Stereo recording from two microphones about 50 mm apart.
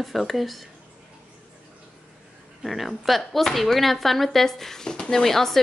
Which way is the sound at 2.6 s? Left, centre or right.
Centre.